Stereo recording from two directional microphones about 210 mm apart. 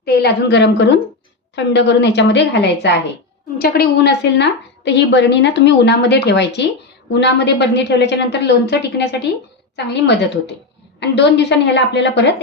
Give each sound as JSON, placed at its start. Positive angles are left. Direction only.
{"t": 0.0, "sound": "a woman's voice", "side_deg": 50}